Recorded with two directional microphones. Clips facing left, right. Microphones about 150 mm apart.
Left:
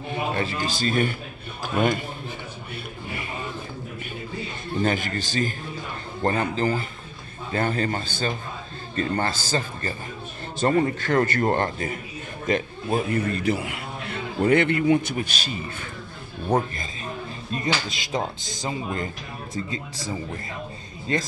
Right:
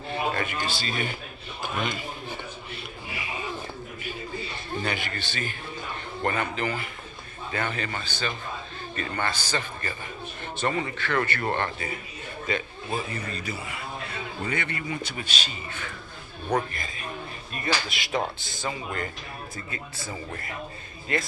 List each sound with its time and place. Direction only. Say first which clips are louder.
0.3 s a man's voice: left 3 dB; 25° left (ahead or behind)
0.7 s a man's voice: left 7 dB; 45° left (ahead or behind)
4.8 s a man's voice: left 9 dB; 45° left (ahead or behind)
16.4 s speech: left 3 dB; 25° left (ahead or behind)